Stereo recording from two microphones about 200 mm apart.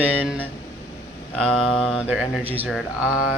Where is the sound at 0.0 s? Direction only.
5° right (ahead or behind).